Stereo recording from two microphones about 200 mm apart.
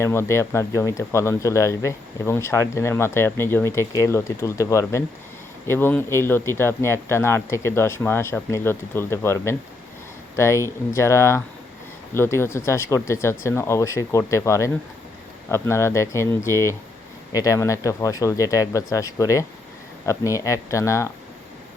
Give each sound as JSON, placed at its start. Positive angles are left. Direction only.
{"t": 0.0, "sound": "speech", "side_deg": 10}